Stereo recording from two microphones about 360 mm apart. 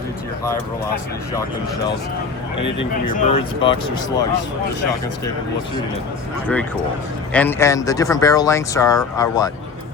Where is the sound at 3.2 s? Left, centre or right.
Centre.